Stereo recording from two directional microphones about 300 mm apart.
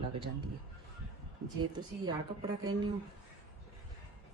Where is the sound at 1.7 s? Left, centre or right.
Centre.